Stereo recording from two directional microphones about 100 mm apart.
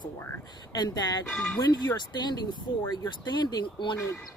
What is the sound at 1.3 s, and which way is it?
Speech, 10° left (ahead or behind).